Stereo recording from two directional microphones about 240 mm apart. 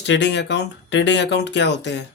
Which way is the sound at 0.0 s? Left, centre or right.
Left.